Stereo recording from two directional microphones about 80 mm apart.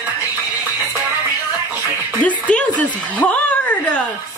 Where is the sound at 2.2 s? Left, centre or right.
Centre.